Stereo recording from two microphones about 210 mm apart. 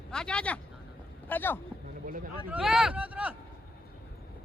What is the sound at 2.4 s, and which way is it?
Speech, 5° right (ahead or behind).